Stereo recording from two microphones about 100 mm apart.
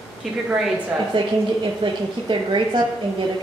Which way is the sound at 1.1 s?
60° right (ahead or behind).